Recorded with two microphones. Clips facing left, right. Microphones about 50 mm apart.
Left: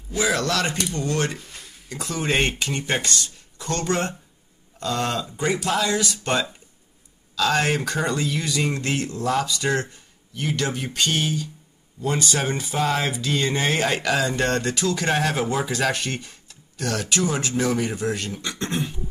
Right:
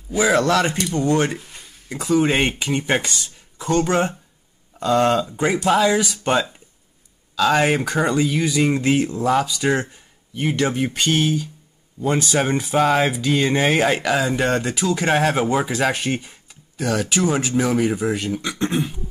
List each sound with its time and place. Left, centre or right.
0.3 s speech: right
1.4 s a sound: centre
1.9 s speech: centre